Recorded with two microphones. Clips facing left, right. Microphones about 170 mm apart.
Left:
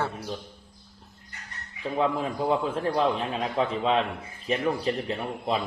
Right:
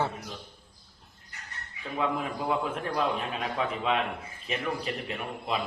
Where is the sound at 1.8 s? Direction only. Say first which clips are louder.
Left 4 dB; 30° left (ahead or behind).